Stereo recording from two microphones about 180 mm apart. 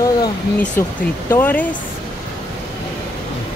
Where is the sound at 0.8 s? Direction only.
15° left (ahead or behind).